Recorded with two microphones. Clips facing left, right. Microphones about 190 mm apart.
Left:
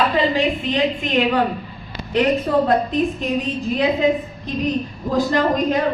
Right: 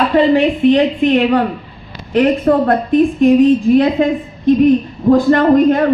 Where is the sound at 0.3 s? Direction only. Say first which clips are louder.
Right 9 dB; 60° right (ahead or behind).